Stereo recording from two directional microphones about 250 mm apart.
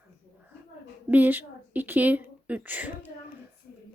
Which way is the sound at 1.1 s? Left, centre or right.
Centre.